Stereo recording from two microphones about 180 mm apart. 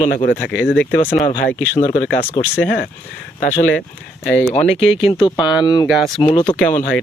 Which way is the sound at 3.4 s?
45° left (ahead or behind).